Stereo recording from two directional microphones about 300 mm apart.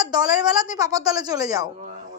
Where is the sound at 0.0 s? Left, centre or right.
Centre.